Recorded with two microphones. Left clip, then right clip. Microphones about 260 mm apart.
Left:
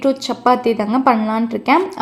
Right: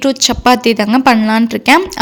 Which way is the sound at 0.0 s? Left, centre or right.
Right.